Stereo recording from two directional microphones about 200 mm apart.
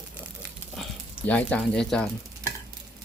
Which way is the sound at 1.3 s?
5° left (ahead or behind).